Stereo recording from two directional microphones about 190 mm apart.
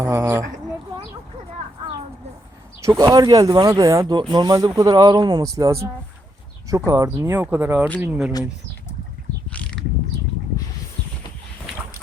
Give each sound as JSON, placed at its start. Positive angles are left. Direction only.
{"t": 0.0, "sound": "speech", "side_deg": -15}
{"t": 2.8, "sound": "speech", "side_deg": -20}
{"t": 9.5, "sound": "mechanisms", "side_deg": 5}